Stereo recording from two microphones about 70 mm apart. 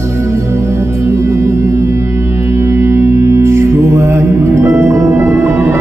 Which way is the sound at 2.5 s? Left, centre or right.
Right.